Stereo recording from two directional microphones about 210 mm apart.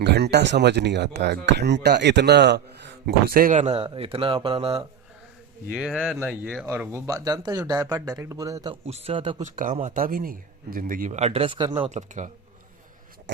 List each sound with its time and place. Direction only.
0.0 s speech: 50° right (ahead or behind); by 4.9 s 25° right (ahead or behind)
5.7 s speech: 5° right (ahead or behind)
8.8 s a man's voice: 30° right (ahead or behind)
9.6 s speech: 35° right (ahead or behind)
11.8 s speech: 35° right (ahead or behind)